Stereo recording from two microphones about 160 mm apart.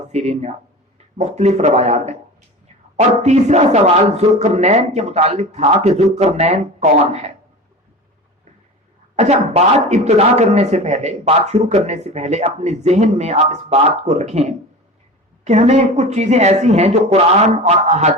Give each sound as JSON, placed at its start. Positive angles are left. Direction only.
{"t": 0.1, "sound": "a man's voice", "side_deg": -45}
{"t": 3.2, "sound": "a man's voice", "side_deg": -45}
{"t": 9.1, "sound": "a man's voice", "side_deg": -45}